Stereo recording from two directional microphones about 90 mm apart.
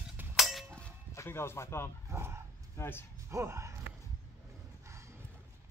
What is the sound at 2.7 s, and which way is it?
Speech, 25° left (ahead or behind).